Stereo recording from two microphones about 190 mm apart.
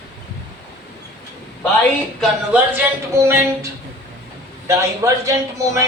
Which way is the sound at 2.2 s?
5° right (ahead or behind).